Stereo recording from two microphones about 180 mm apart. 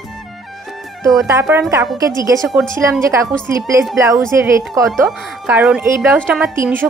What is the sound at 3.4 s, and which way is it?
A woman's voice, 15° right (ahead or behind).